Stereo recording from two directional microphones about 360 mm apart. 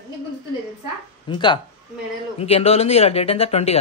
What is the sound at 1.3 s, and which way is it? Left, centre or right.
Speech, centre.